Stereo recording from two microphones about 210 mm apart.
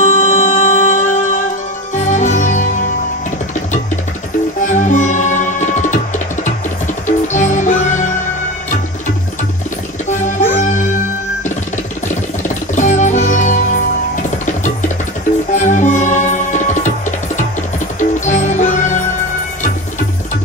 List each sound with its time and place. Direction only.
0.0 s music: 35° left (ahead or behind)
4.6 s music: 35° left (ahead or behind)
10.2 s music: 35° left (ahead or behind)
12.7 s music: 35° left (ahead or behind)
17.9 s music: 35° left (ahead or behind)